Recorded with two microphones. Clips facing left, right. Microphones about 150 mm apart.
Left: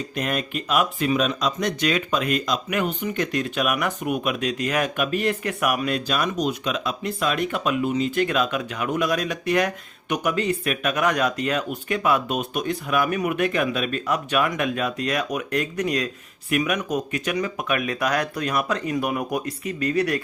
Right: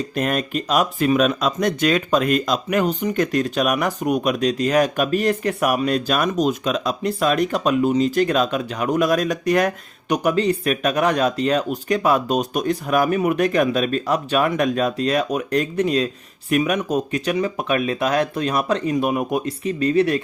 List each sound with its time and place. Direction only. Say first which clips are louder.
0.2 s speech: right 4 dB; 45° right (ahead or behind)
6.1 s speech: right 4 dB; 45° right (ahead or behind)
10.2 s speech: right 5 dB; 35° right (ahead or behind)